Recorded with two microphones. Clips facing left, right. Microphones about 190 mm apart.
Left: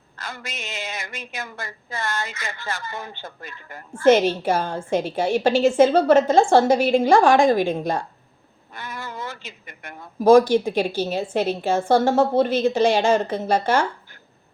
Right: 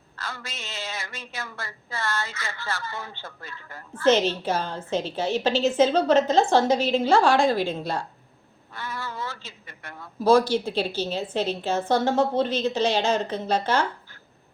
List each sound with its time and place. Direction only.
0.2 s speech: 15° left (ahead or behind)